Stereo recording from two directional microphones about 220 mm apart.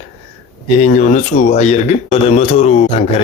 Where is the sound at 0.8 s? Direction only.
35° left (ahead or behind).